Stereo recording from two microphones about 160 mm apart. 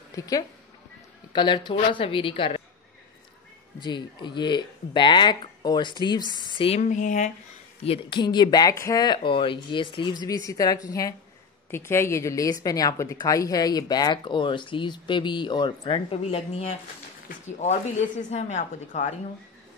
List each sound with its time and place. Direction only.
0.1 s a woman's voice: 20° left (ahead or behind)
3.8 s a woman's voice: 30° left (ahead or behind)
6.8 s a woman's voice: 50° left (ahead or behind)
7.8 s a woman's voice: 35° left (ahead or behind)
18.3 s a woman's voice: 45° left (ahead or behind)